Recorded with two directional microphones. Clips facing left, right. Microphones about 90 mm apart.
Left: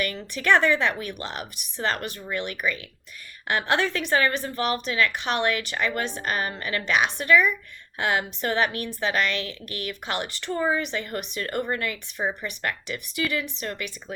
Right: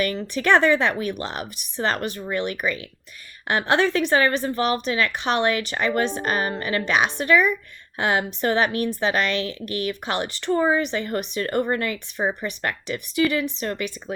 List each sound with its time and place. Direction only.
0.0 s a woman's voice: 30° right (ahead or behind)